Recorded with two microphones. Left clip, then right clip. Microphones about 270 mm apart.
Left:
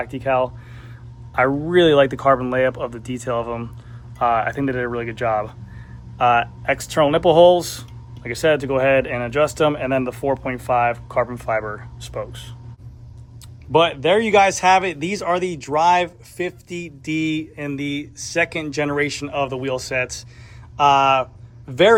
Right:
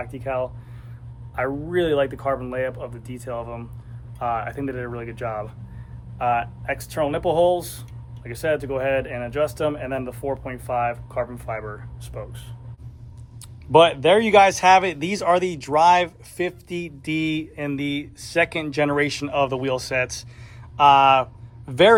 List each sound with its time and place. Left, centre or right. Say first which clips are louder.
0.1 s speech: left 8 dB; left
13.7 s speech: right 1 dB; centre